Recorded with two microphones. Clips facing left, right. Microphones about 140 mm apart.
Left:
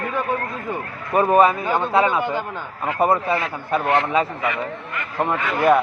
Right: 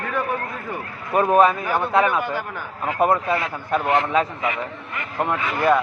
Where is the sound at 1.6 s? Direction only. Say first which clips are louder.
Left 1 dB; 20° left (ahead or behind).